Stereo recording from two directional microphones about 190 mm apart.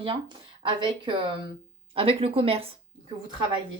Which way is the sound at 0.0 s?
25° right (ahead or behind).